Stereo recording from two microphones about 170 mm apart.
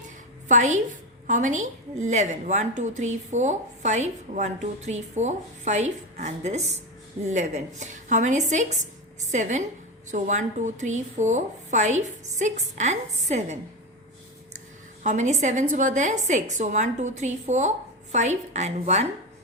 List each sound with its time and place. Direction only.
0.4 s a woman's voice: 45° right (ahead or behind)
15.0 s a woman's voice: 45° right (ahead or behind)